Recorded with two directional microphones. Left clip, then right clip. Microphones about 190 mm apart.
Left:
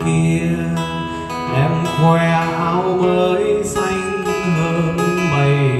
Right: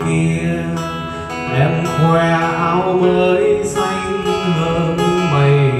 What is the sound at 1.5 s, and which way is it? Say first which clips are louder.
Music: right 2 dB; 15° left (ahead or behind).